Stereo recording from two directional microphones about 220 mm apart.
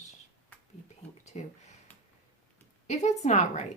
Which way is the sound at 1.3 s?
30° left (ahead or behind).